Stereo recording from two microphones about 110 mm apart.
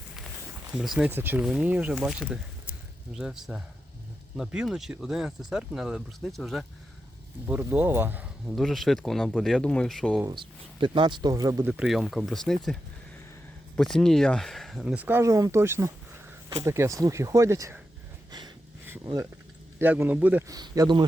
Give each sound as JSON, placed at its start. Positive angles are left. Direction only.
{"t": 0.7, "sound": "speech", "side_deg": -5}
{"t": 1.1, "sound": "speech", "side_deg": -20}
{"t": 7.4, "sound": "speech", "side_deg": -15}
{"t": 8.4, "sound": "speech", "side_deg": 0}
{"t": 10.2, "sound": "speech", "side_deg": -45}
{"t": 11.6, "sound": "speech", "side_deg": -10}
{"t": 13.7, "sound": "speech", "side_deg": 5}
{"t": 14.9, "sound": "speech", "side_deg": -20}
{"t": 18.3, "sound": "a sound", "side_deg": -40}
{"t": 19.0, "sound": "speech", "side_deg": -30}
{"t": 20.1, "sound": "speech", "side_deg": -15}
{"t": 20.5, "sound": "speech", "side_deg": -35}